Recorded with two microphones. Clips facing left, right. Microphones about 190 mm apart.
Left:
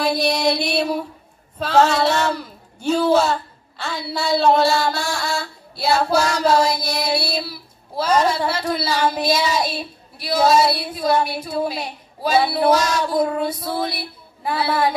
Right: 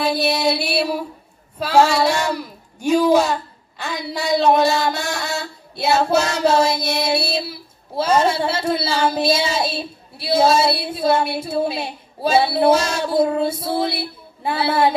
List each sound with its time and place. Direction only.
0.0 s mantra: 5° right (ahead or behind)
1.6 s speech: 10° right (ahead or behind); by 14.9 s 25° right (ahead or behind)